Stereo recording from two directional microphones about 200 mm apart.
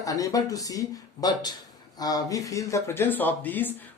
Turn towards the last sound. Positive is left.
turn(degrees=10)  # may be behind; listen again after turning